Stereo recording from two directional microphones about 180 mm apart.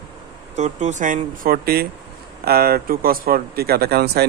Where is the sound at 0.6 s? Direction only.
40° right (ahead or behind).